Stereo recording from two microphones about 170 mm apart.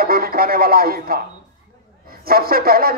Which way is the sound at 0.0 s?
60° right (ahead or behind).